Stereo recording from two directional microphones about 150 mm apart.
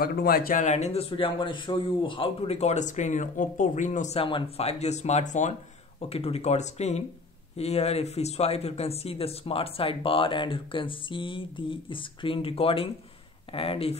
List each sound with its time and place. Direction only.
0.0 s a man's voice: 90° left; by 4.2 s 55° left (ahead or behind)
4.2 s a man's voice: 35° left (ahead or behind)